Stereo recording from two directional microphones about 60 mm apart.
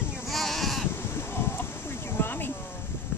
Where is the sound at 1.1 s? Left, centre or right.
Left.